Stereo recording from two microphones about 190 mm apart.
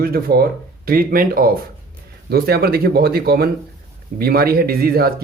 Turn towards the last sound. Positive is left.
turn(degrees=-55)  # may be behind; listen again after turning